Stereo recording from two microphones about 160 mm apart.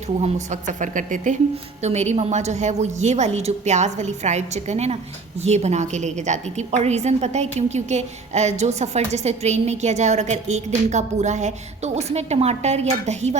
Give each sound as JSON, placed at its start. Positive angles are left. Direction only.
{"t": 0.2, "sound": "a woman's voice", "side_deg": -50}